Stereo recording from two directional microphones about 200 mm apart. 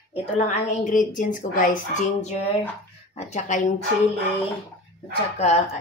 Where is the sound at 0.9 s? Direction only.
40° left (ahead or behind).